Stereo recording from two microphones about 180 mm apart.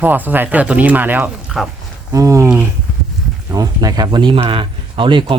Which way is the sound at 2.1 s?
20° right (ahead or behind).